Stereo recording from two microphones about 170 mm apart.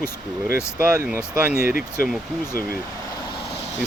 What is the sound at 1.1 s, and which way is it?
Speech, 10° right (ahead or behind).